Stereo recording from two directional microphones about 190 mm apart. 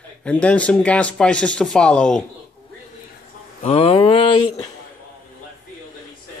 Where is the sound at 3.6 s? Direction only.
30° left (ahead or behind).